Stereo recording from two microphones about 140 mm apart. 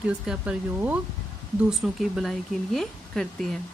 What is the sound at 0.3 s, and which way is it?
Speech, 10° right (ahead or behind).